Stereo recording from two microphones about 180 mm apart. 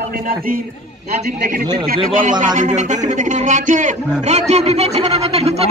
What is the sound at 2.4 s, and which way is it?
Speech, 45° right (ahead or behind).